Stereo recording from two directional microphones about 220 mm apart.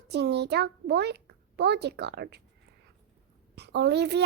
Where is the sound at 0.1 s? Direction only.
50° right (ahead or behind).